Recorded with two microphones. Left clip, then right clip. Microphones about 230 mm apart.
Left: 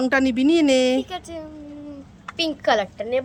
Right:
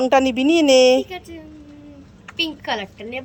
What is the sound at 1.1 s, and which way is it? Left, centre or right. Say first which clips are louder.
A woman's voice: left 2 dB; centre.